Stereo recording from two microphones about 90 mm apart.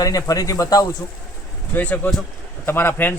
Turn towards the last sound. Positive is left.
turn(degrees=20)  # may be behind; listen again after turning